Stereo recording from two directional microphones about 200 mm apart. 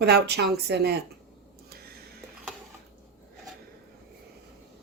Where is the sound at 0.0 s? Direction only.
55° right (ahead or behind).